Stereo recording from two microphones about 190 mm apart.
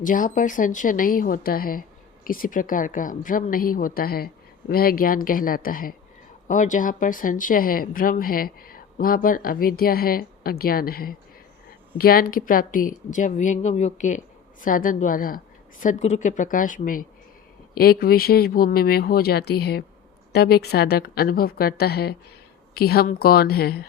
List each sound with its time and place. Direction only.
0.0 s a woman's voice: 45° left (ahead or behind)